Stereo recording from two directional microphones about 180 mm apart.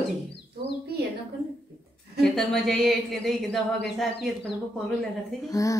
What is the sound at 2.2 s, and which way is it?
Speech, centre (ahead or behind).